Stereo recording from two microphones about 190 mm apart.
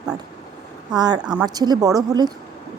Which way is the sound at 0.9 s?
20° right (ahead or behind).